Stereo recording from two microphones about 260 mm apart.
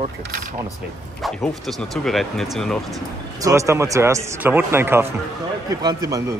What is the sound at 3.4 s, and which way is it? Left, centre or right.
A man's voice, centre.